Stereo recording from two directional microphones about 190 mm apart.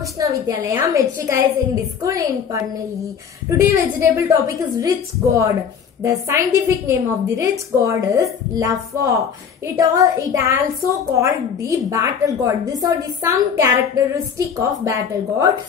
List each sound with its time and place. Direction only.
0.2 s a woman's voice: 15° right (ahead or behind)